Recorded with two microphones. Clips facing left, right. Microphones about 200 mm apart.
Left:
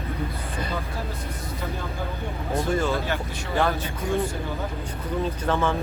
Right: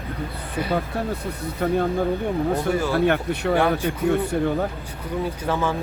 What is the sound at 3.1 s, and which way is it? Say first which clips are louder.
Speech: right 9 dB; 65° right (ahead or behind).